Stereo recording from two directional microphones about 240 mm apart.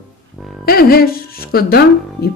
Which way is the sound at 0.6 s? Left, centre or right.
Left.